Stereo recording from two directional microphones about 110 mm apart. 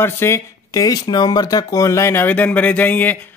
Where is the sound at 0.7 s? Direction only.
35° left (ahead or behind).